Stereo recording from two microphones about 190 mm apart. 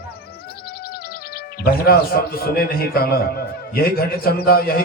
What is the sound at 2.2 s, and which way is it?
A man's voice, 55° left (ahead or behind).